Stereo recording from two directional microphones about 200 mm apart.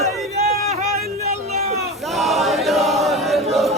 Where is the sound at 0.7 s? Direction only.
35° right (ahead or behind).